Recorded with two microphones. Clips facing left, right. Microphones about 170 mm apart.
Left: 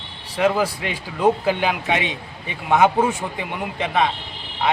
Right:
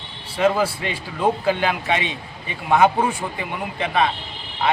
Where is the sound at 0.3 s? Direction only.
10° left (ahead or behind).